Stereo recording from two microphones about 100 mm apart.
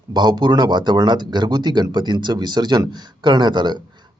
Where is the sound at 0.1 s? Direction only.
45° right (ahead or behind).